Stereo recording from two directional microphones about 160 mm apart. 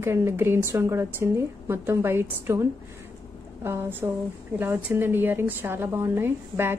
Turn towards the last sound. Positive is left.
turn(degrees=-15)  # may be behind; listen again after turning